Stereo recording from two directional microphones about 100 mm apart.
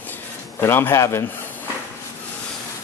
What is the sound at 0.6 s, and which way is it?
Speech, 25° left (ahead or behind).